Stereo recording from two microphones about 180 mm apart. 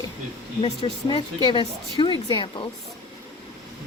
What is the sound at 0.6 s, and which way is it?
Speech, 25° left (ahead or behind).